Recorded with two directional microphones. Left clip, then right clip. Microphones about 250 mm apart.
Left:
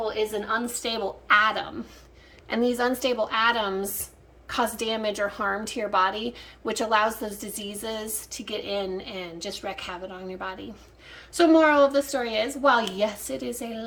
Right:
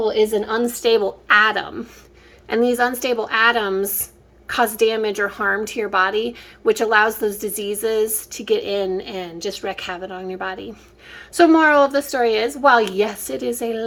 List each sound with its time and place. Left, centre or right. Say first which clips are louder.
0.0 s a woman's voice: right 9 dB; right